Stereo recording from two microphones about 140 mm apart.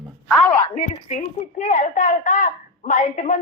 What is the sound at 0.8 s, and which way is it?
A woman's voice, 65° left (ahead or behind).